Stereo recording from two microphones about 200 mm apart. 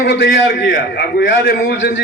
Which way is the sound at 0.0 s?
60° left (ahead or behind).